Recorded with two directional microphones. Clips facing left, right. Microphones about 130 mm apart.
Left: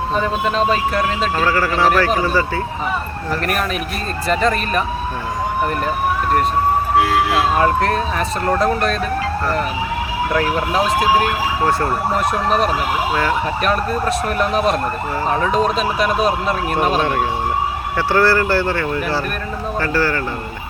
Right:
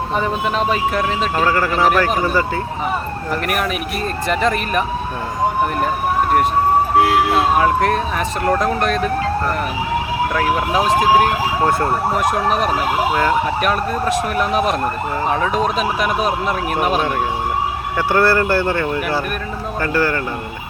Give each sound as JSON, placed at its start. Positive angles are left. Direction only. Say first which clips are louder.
{"t": 0.2, "sound": "speech", "louder": "left 1 dB", "side_deg": -15}
{"t": 4.3, "sound": "speech", "louder": "left 2 dB", "side_deg": -15}
{"t": 7.6, "sound": "speech", "louder": "even", "side_deg": -10}
{"t": 10.7, "sound": "speech", "louder": "right 1 dB", "side_deg": -15}
{"t": 12.5, "sound": "speech", "louder": "left 1 dB", "side_deg": -10}
{"t": 14.3, "sound": "speech", "louder": "even", "side_deg": -15}